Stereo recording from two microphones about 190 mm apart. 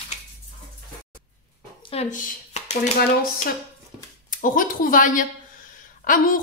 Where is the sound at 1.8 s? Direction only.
35° left (ahead or behind).